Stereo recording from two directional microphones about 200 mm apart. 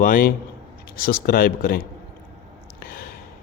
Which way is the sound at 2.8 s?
45° left (ahead or behind).